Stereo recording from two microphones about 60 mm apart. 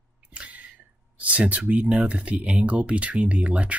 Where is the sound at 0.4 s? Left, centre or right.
Right.